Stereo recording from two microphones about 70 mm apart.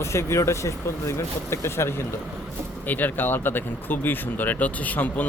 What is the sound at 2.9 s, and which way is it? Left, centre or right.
Speech, left.